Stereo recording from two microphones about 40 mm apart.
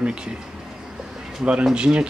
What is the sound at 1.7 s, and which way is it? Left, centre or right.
Speech, right.